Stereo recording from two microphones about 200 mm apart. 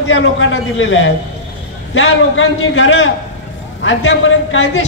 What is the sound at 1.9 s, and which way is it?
A man's voice, 85° left.